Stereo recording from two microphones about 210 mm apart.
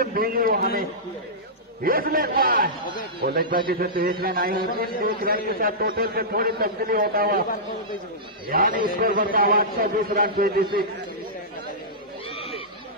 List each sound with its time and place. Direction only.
0.0 s a man's voice: 45° right (ahead or behind)
1.8 s a man's voice: 45° right (ahead or behind)
8.5 s a man's voice: 45° right (ahead or behind)
12.4 s neigh: 30° left (ahead or behind)